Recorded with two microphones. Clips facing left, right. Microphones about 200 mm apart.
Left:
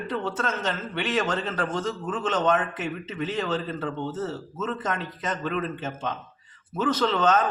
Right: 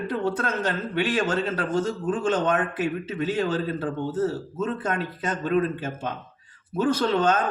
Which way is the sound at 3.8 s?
35° right (ahead or behind).